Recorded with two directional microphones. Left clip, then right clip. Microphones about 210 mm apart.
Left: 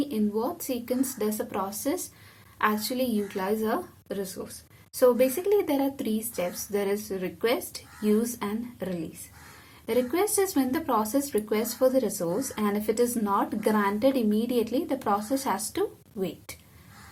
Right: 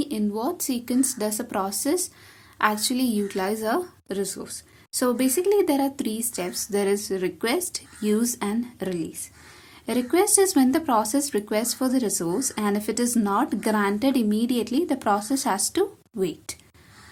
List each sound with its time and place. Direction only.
0.0 s speech: 50° right (ahead or behind)